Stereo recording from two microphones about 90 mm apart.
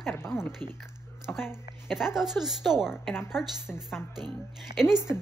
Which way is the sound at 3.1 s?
25° left (ahead or behind).